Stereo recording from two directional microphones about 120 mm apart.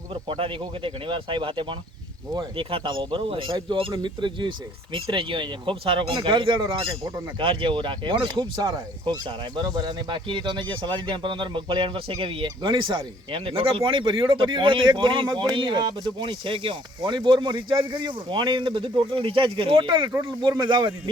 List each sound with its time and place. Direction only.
0.1 s speech: 45° right (ahead or behind)